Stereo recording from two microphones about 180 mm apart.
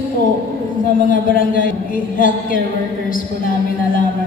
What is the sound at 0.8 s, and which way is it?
Speech, 50° left (ahead or behind).